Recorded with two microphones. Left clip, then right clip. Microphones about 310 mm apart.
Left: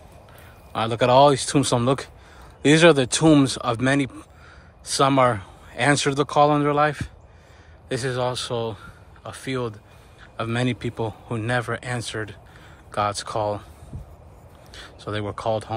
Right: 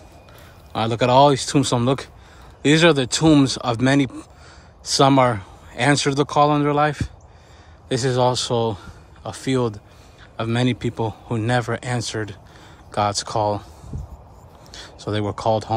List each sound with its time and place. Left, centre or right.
0.7 s speech: centre
14.7 s speech: centre